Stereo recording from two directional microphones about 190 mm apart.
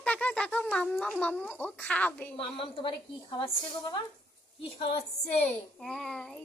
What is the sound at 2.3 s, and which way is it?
Speech, 30° left (ahead or behind).